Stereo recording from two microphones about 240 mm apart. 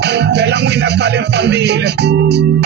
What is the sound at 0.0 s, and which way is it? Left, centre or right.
Music, right.